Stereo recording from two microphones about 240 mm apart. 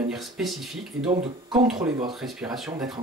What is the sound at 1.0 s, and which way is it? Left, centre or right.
Speech, right.